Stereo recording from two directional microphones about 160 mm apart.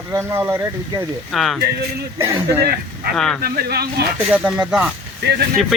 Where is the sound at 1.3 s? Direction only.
Centre (ahead or behind).